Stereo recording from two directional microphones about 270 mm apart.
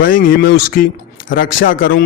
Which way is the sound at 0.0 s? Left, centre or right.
Left.